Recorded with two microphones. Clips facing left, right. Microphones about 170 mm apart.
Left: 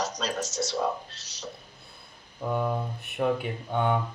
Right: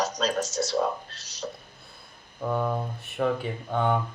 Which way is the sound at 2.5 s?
5° left (ahead or behind).